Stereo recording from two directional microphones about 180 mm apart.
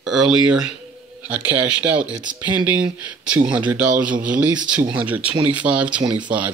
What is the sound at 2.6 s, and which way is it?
Speech, 10° right (ahead or behind).